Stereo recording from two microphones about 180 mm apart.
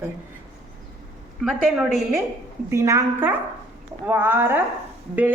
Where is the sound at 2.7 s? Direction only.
15° right (ahead or behind).